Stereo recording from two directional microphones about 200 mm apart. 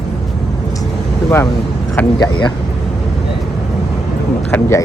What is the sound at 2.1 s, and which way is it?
Speech, 20° left (ahead or behind).